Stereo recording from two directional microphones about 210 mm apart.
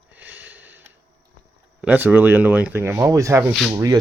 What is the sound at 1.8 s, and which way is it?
Speech, 10° right (ahead or behind).